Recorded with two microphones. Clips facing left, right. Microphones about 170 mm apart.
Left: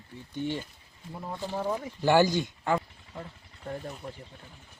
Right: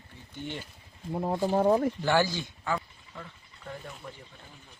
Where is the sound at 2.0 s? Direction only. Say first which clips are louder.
Left 8 dB; 15° left (ahead or behind).